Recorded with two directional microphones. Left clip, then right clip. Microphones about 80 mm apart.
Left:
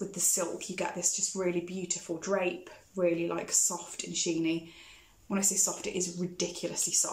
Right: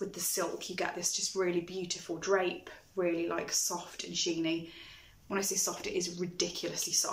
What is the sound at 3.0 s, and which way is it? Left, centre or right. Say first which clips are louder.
Speech: left 3 dB; left.